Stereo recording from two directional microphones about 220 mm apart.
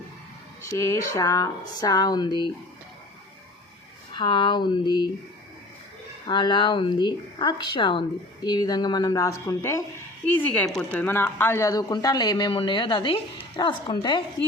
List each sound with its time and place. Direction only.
0.6 s a woman's voice: 15° left (ahead or behind)
4.1 s speech: 20° left (ahead or behind)
6.2 s a woman's voice: 20° left (ahead or behind)